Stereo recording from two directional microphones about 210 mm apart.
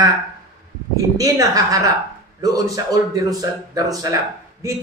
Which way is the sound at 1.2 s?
15° right (ahead or behind).